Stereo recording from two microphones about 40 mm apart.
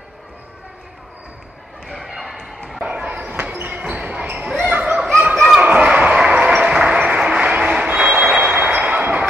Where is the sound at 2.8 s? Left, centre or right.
Right.